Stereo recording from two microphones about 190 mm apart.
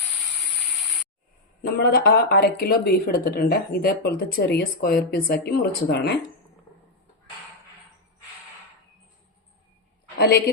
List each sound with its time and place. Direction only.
1.6 s speech: 55° left (ahead or behind)
10.2 s a woman's voice: 55° left (ahead or behind)